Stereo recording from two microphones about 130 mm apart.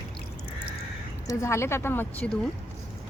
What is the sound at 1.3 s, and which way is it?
Speech, 20° left (ahead or behind).